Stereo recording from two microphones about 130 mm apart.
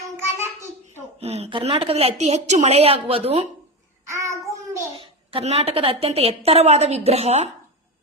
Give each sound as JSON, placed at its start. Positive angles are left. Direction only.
{"t": 0.2, "sound": "child singing", "side_deg": -20}
{"t": 1.2, "sound": "a woman's voice", "side_deg": -50}
{"t": 4.1, "sound": "child singing", "side_deg": -25}
{"t": 4.9, "sound": "a woman's voice", "side_deg": -50}